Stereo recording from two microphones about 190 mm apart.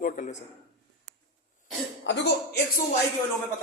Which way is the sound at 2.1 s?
65° left (ahead or behind).